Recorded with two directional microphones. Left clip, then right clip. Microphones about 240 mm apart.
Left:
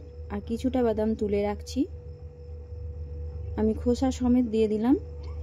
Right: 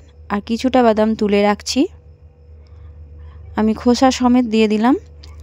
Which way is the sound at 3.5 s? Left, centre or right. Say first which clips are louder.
Right 11 dB; right.